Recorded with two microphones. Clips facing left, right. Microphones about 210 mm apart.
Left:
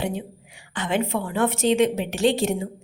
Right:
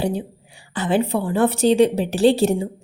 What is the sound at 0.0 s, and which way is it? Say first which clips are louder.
A woman's voice: right 5 dB; 35° right (ahead or behind).